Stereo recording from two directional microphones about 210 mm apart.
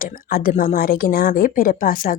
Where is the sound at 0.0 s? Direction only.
45° left (ahead or behind).